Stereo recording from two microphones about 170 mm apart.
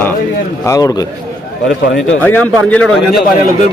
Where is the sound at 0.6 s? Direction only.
20° left (ahead or behind).